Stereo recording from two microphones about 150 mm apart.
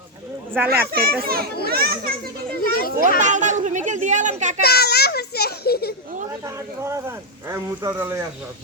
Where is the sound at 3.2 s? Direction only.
55° right (ahead or behind).